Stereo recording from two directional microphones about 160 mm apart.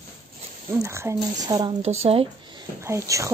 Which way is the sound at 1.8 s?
40° right (ahead or behind).